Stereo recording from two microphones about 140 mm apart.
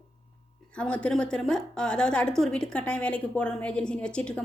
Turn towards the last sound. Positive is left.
turn(degrees=5)  # may be behind; listen again after turning